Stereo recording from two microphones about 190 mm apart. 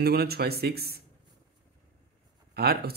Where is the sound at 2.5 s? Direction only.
55° right (ahead or behind).